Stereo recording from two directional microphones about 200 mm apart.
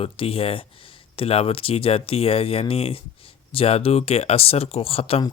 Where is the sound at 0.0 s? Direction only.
30° left (ahead or behind).